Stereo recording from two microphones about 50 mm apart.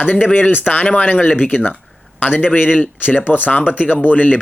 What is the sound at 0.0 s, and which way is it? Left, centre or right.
A man's voice, left.